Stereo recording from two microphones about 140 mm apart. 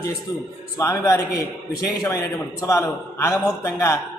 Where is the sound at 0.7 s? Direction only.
20° left (ahead or behind).